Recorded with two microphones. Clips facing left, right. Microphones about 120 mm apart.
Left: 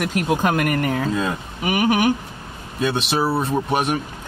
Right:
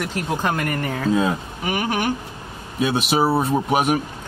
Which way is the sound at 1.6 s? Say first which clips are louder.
Left 5 dB; 10° left (ahead or behind).